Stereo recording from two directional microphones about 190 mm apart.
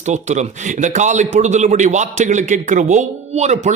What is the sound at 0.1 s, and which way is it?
Speech, 40° right (ahead or behind).